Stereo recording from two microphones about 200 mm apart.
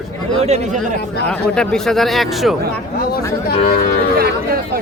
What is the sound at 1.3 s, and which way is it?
Speech, 5° left (ahead or behind).